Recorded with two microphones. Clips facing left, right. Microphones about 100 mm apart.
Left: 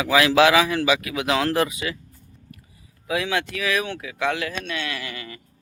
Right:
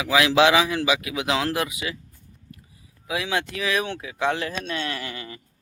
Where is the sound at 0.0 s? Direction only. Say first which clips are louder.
Left 1 dB; 15° right (ahead or behind).